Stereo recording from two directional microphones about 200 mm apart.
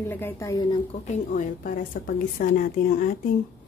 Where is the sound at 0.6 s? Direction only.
25° left (ahead or behind); by 3.1 s 45° left (ahead or behind).